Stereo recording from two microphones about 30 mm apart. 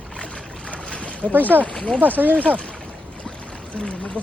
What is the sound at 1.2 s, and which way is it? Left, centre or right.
Speech, right.